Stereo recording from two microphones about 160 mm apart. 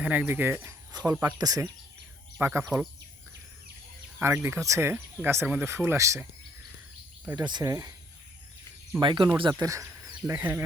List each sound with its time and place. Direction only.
0.0 s speech: 10° right (ahead or behind)
4.2 s speech: 15° right (ahead or behind)
7.3 s speech: 25° right (ahead or behind)
9.0 s speech: 30° right (ahead or behind)